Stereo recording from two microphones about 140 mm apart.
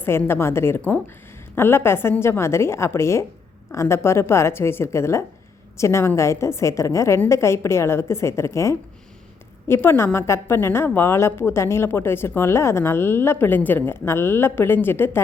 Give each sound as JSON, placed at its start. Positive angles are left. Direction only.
{"t": 0.0, "sound": "a woman's voice", "side_deg": 15}